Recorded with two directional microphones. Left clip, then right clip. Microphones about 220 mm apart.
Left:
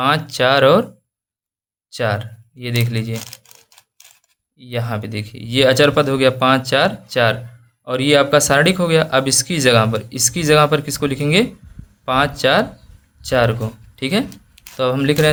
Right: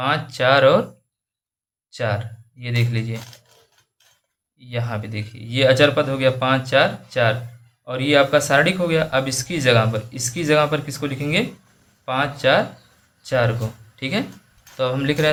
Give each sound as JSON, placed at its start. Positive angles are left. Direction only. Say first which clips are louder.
{"t": 0.0, "sound": "speech", "louder": "left 4 dB", "side_deg": 40}
{"t": 1.9, "sound": "speech", "louder": "left 4 dB", "side_deg": 40}
{"t": 4.5, "sound": "speech", "louder": "left 4 dB", "side_deg": 40}